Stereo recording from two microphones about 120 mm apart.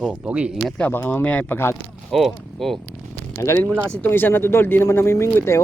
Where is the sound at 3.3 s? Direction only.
20° left (ahead or behind).